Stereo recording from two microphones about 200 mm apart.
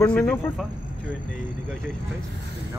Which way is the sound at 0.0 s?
10° left (ahead or behind).